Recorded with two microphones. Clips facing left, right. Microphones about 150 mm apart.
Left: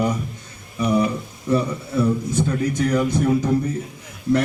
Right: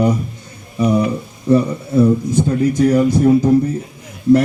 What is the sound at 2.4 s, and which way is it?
Speech, 25° right (ahead or behind).